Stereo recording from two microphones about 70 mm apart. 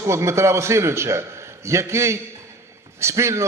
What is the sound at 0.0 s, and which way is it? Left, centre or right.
A man's voice, right.